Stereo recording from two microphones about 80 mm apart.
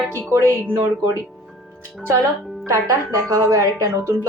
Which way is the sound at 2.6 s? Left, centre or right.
Right.